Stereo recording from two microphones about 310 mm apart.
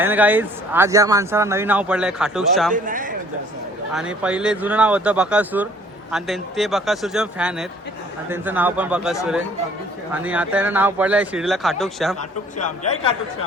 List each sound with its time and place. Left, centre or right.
0.0 s a man's voice: centre
2.7 s a man's voice: right
4.2 s a man's voice: centre
12.9 s speech: centre